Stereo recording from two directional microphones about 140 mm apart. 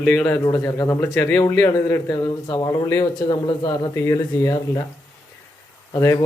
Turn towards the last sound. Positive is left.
turn(degrees=25)  # may be behind; listen again after turning